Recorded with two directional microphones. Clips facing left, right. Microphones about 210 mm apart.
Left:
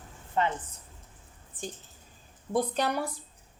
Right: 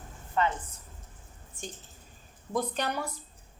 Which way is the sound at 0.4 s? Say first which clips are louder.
Even; 25° left (ahead or behind).